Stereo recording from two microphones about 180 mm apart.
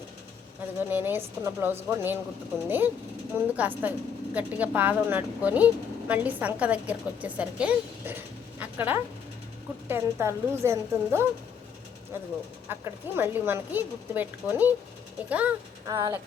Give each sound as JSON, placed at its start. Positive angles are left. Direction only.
{"t": 0.8, "sound": "a woman's voice", "side_deg": -10}